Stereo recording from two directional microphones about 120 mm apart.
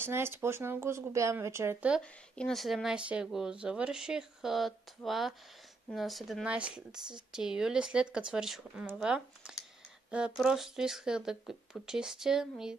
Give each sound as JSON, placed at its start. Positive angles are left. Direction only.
{"t": 0.0, "sound": "speech", "side_deg": -20}
{"t": 2.3, "sound": "speech", "side_deg": 5}